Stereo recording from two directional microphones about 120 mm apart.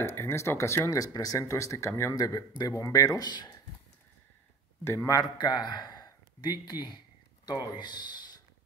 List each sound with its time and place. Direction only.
0.0 s speech: 20° left (ahead or behind)
4.8 s speech: 25° left (ahead or behind)
5.4 s speech: 35° left (ahead or behind)